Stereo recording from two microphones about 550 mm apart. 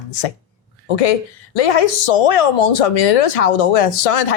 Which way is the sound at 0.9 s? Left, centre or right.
Left.